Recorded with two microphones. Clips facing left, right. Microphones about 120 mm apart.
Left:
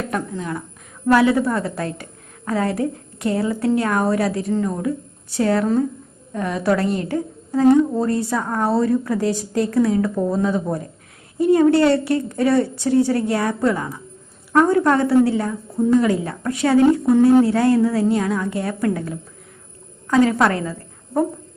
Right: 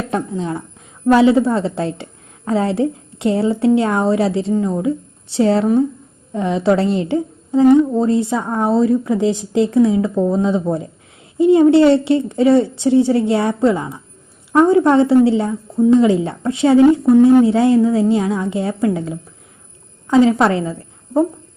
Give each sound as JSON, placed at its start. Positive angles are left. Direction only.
{"t": 0.1, "sound": "a woman's voice", "side_deg": -25}